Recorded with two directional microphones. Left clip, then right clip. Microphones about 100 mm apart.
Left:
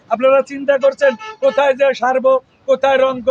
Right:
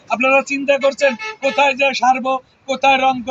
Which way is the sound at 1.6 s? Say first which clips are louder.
Right 1 dB; 65° left (ahead or behind).